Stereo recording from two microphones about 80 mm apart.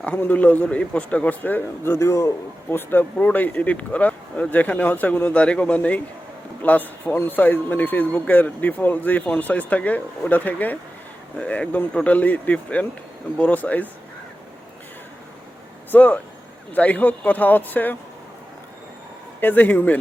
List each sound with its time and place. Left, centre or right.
0.0 s a man's voice: left
2.6 s a man's voice: left
15.9 s a man's voice: left
19.4 s a man's voice: left